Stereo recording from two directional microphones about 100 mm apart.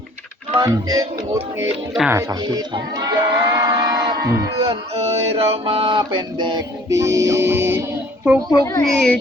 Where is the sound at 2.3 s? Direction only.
40° right (ahead or behind).